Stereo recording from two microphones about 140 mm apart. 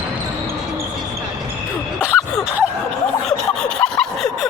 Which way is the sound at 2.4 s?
10° right (ahead or behind).